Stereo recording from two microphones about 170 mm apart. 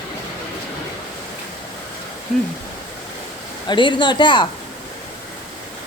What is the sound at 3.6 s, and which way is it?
Speech, 25° left (ahead or behind).